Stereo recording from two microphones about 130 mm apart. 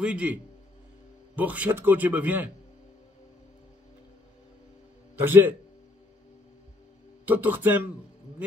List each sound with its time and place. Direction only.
0.0 s speech: 10° right (ahead or behind)
5.2 s speech: 15° right (ahead or behind)
7.2 s speech: 15° right (ahead or behind)